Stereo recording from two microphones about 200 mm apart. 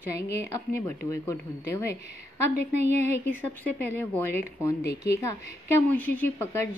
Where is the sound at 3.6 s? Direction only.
10° left (ahead or behind).